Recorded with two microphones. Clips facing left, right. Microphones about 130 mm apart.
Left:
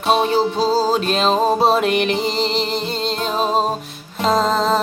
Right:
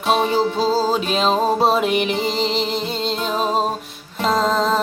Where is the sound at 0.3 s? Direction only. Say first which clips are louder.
Left 1 dB; 5° left (ahead or behind).